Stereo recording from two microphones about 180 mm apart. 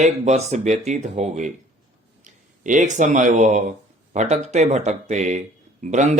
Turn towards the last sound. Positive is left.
turn(degrees=-40)  # may be behind; listen again after turning